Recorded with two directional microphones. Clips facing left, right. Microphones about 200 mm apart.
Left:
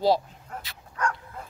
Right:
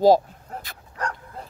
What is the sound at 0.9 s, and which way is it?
Bow-wow, 35° right (ahead or behind).